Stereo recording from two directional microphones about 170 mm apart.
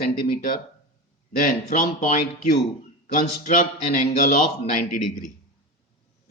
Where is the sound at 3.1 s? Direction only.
50° left (ahead or behind).